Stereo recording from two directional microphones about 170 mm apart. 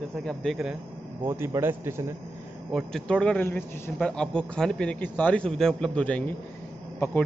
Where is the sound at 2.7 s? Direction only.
5° left (ahead or behind).